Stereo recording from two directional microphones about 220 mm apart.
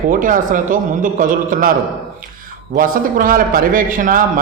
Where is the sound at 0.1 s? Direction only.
40° right (ahead or behind).